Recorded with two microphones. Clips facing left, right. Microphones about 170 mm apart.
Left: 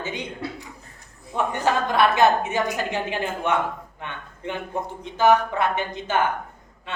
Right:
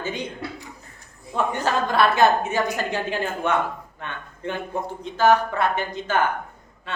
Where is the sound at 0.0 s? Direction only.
20° left (ahead or behind).